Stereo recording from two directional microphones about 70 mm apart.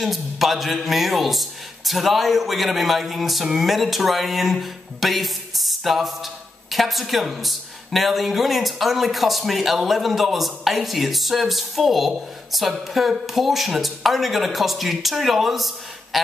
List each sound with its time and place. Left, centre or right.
0.0 s speech: centre